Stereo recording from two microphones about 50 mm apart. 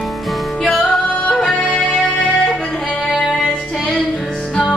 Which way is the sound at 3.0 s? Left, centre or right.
Centre.